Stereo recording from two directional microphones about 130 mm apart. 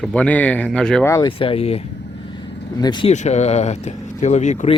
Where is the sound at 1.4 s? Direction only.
45° left (ahead or behind).